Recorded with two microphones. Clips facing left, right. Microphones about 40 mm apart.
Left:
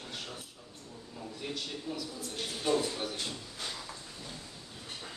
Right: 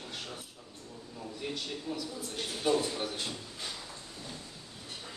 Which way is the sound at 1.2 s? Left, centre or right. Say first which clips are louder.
Right 1 dB; centre.